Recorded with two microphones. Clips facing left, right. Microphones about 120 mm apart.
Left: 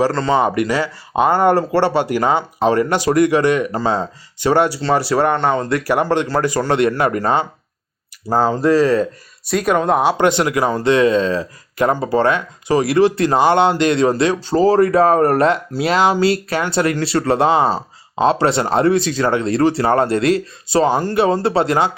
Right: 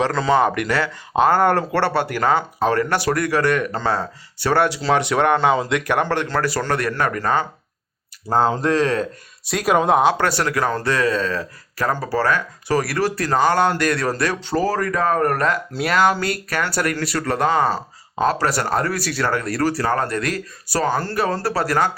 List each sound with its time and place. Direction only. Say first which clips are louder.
1.1 s speech: left 2 dB; 5° left (ahead or behind)
4.8 s speech: left 2 dB; centre (ahead or behind); by 7.4 s 20° left (ahead or behind)
8.3 s speech: left 3 dB; 5° left (ahead or behind)
10.0 s speech: left 3 dB; 10° left (ahead or behind); by 21.8 s 25° left (ahead or behind)